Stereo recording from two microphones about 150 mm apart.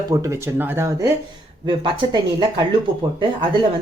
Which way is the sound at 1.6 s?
35° right (ahead or behind).